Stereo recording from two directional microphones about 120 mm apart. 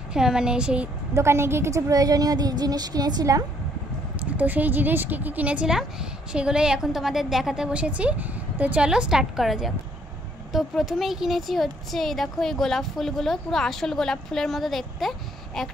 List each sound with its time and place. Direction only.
0.1 s speech: 5° right (ahead or behind)
1.1 s a woman's voice: 20° right (ahead or behind)
4.4 s speech: 15° right (ahead or behind); by 15.7 s centre (ahead or behind)